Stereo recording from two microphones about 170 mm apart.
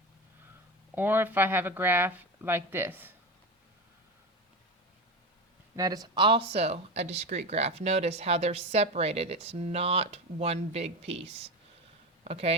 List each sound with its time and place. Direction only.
0.9 s speech: 10° right (ahead or behind)
5.7 s speech: 20° right (ahead or behind); by 12.5 s 35° right (ahead or behind)